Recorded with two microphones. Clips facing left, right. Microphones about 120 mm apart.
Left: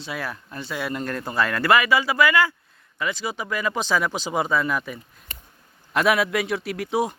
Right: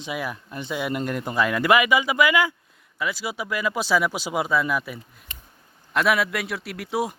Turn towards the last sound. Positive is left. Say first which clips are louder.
# left 3 dB
turn(degrees=0)  # may be behind; listen again after turning